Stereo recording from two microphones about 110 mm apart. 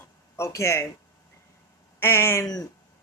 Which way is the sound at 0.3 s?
25° left (ahead or behind).